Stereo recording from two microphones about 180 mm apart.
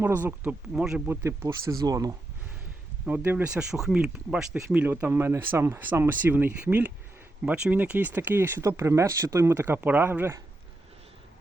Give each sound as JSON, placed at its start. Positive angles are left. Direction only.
{"t": 0.0, "sound": "speech", "side_deg": -10}
{"t": 3.1, "sound": "speech", "side_deg": -10}